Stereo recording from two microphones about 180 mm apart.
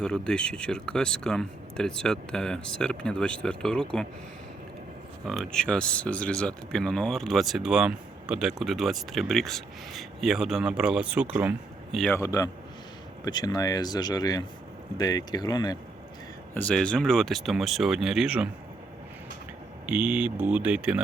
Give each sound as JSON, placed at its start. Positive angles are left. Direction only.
{"t": 0.0, "sound": "speech", "side_deg": 5}
{"t": 5.2, "sound": "speech", "side_deg": 0}
{"t": 12.1, "sound": "a man's voice", "side_deg": 15}
{"t": 16.6, "sound": "speech", "side_deg": 5}
{"t": 19.9, "sound": "speech", "side_deg": -10}